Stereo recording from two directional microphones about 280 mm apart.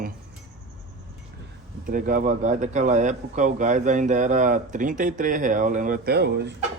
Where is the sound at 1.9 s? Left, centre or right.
Right.